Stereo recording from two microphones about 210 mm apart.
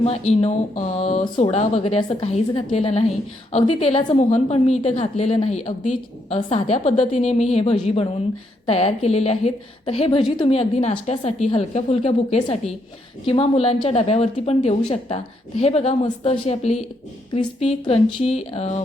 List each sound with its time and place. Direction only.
0.0 s a woman's voice: 30° left (ahead or behind)